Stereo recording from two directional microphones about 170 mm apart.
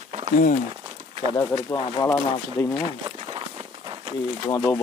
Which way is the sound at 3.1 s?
30° right (ahead or behind).